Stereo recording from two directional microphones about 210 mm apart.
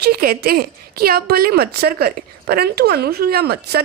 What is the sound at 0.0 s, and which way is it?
A woman's voice, 45° right (ahead or behind).